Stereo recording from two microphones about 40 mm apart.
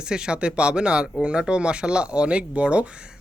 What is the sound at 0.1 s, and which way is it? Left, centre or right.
Speech, right.